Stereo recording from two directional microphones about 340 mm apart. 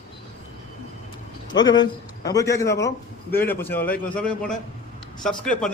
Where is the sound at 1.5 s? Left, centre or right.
Centre.